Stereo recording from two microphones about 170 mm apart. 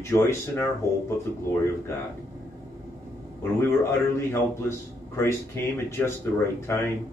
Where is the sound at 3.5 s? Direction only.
15° left (ahead or behind).